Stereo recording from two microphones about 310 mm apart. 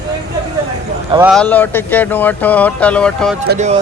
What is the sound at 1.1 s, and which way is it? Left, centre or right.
Speech, centre.